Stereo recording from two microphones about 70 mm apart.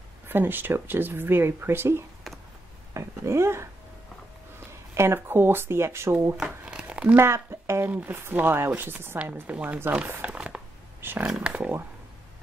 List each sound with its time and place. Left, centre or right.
0.3 s speech: right
4.9 s speech: right
6.3 s crumpling: centre
7.2 s speech: right
7.9 s speech: right
9.2 s speech: right
10.2 s a sound: centre
11.0 s a sound: right
11.2 s a sound: centre